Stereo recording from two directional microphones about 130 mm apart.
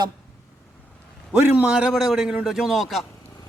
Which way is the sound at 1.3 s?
15° right (ahead or behind).